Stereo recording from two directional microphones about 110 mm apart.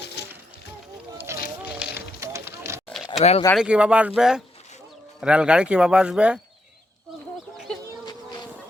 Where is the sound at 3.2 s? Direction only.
75° left (ahead or behind).